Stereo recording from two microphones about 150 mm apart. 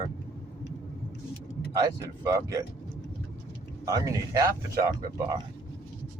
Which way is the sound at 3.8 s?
20° right (ahead or behind).